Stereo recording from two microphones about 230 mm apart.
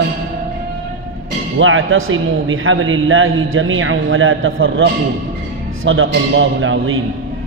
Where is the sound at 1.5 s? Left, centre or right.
Right.